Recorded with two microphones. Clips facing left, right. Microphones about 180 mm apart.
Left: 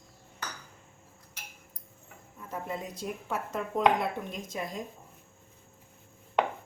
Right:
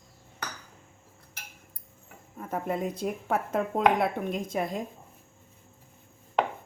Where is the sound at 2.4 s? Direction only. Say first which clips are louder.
Right 6 dB; 55° right (ahead or behind).